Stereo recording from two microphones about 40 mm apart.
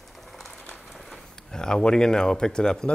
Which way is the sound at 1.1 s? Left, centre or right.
Centre.